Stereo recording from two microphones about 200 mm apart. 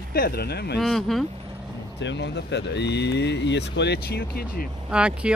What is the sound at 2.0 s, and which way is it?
Speech, 60° left (ahead or behind).